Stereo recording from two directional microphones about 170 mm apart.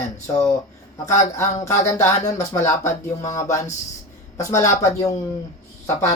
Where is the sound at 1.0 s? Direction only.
20° left (ahead or behind).